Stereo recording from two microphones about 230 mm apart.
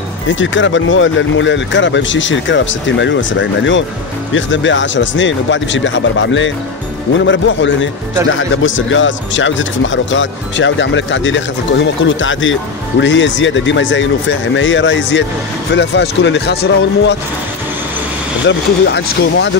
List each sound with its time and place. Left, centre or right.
0.3 s a man's voice: left
18.5 s speech: left